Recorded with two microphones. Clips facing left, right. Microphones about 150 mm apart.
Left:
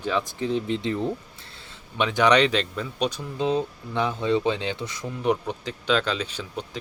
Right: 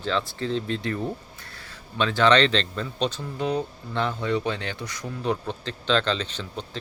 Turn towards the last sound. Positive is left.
turn(degrees=10)  # may be behind; listen again after turning